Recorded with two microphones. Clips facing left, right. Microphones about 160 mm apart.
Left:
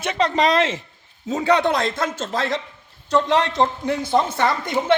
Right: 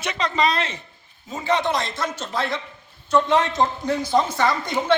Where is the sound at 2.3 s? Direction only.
90° left.